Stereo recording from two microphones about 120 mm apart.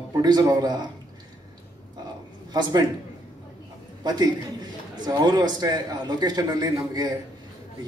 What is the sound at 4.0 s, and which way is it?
A man's voice, 35° right (ahead or behind).